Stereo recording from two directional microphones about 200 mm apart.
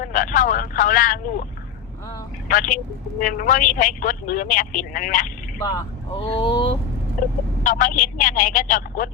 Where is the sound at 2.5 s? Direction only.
40° left (ahead or behind).